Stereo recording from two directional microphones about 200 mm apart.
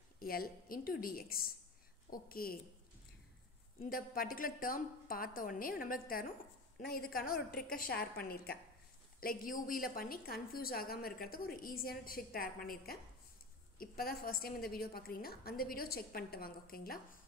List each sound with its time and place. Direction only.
0.2 s a woman's voice: 45° left (ahead or behind)
3.8 s a woman's voice: 45° left (ahead or behind)